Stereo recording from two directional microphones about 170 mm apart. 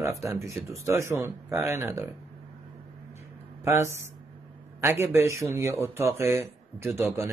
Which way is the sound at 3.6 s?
15° right (ahead or behind).